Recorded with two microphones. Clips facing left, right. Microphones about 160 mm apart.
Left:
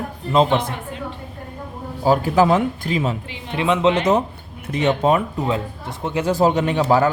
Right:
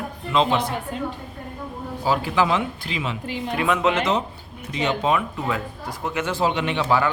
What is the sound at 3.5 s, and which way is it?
Speech, 25° left (ahead or behind).